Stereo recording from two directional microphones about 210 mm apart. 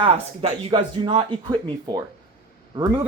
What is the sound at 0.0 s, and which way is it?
Speech, 25° right (ahead or behind).